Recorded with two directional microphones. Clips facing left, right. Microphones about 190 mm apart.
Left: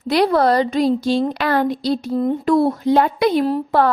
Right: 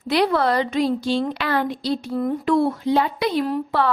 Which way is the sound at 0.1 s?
40° left (ahead or behind).